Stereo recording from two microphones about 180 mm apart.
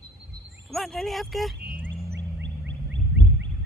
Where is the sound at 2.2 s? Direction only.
80° right.